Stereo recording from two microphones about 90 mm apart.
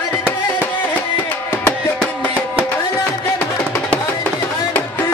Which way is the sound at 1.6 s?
20° left (ahead or behind).